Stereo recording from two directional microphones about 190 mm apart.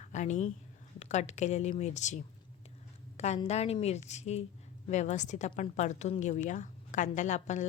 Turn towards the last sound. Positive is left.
turn(degrees=40)  # may be behind; listen again after turning